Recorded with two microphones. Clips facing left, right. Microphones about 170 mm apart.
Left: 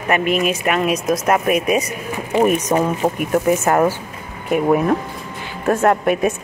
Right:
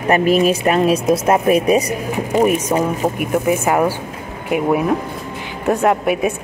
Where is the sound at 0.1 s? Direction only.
35° right (ahead or behind).